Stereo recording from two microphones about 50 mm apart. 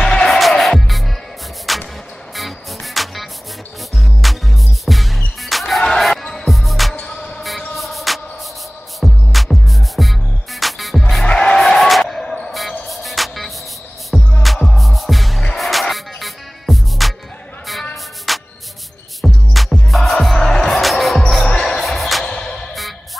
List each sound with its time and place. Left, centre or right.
0.0 s music: centre
1.7 s a sound: centre
2.3 s music: centre
7.1 s music: centre
7.7 s music: centre
11.2 s music: left
11.5 s a sound: centre
12.5 s music: centre
18.3 s music: centre
20.3 s music: centre
22.2 s music: centre